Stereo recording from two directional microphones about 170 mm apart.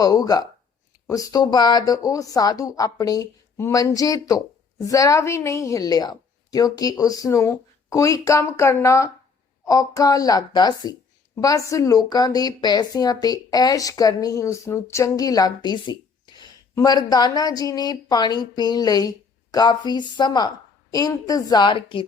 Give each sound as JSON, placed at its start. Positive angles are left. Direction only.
{"t": 0.0, "sound": "speech", "side_deg": 20}